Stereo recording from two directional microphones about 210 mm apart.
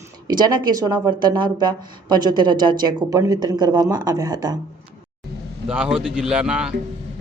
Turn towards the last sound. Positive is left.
turn(degrees=-5)  # may be behind; listen again after turning